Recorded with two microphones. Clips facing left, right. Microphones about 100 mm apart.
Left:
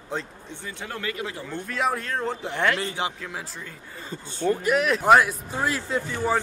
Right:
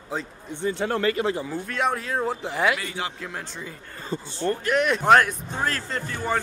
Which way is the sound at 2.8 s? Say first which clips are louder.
Left 3 dB; 20° left (ahead or behind).